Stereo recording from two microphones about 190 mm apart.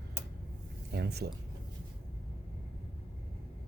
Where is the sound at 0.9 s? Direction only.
60° right (ahead or behind).